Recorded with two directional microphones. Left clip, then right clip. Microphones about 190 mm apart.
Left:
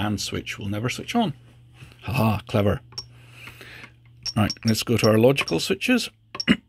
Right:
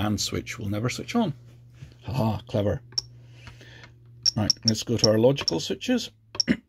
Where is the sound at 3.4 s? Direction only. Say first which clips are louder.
Left 7 dB; 30° left (ahead or behind).